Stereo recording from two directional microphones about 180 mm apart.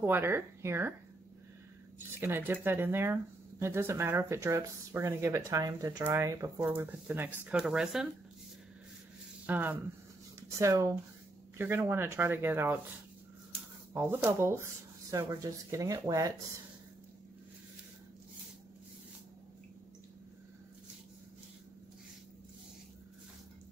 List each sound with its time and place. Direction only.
0.0 s speech: 15° right (ahead or behind)
2.1 s speech: 10° right (ahead or behind)
9.5 s speech: 10° right (ahead or behind)
13.9 s speech: 15° right (ahead or behind)